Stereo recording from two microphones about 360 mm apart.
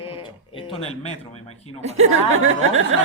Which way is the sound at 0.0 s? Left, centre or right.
Centre.